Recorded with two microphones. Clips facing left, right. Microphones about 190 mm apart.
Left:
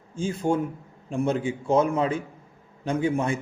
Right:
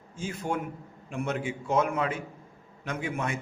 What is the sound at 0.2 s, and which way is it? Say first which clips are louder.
A man's voice: left 7 dB; 30° left (ahead or behind).